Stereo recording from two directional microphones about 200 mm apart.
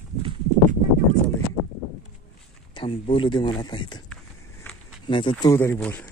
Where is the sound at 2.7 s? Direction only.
25° left (ahead or behind).